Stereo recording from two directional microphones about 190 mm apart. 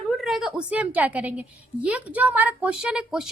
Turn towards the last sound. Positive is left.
turn(degrees=-5)  # may be behind; listen again after turning